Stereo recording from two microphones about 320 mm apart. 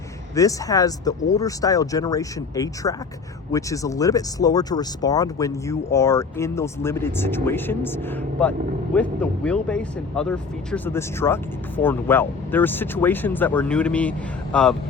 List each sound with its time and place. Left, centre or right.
0.3 s speech: centre